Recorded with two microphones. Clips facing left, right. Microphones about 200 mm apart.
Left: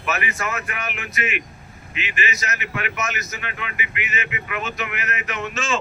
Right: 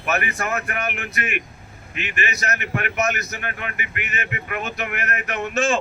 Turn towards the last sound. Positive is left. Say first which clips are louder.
# right 4 dB
turn(degrees=-55)  # may be behind; listen again after turning